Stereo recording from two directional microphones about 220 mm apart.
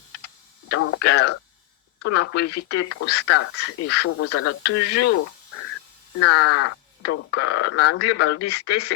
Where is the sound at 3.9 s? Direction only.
90° left.